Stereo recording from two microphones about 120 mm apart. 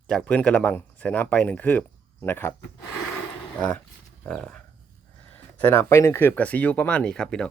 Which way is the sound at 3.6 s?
5° left (ahead or behind).